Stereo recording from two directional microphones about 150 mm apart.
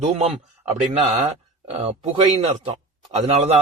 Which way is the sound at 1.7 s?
40° right (ahead or behind).